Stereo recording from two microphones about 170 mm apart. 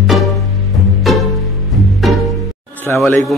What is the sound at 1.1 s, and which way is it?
Music, centre (ahead or behind).